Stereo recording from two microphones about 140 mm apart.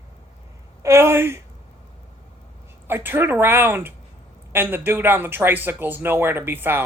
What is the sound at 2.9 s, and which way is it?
Speech, 15° right (ahead or behind).